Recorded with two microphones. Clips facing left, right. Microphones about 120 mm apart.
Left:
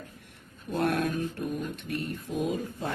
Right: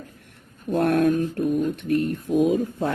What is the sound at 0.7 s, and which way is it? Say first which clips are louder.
Speech: right 8 dB; 50° right (ahead or behind).